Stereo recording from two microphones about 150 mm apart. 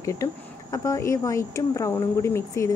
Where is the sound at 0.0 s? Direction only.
20° left (ahead or behind).